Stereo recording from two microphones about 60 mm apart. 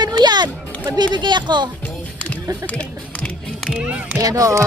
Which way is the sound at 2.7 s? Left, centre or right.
Left.